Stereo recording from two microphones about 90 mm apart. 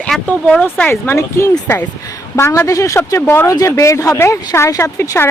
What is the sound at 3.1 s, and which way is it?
Speech, 25° left (ahead or behind).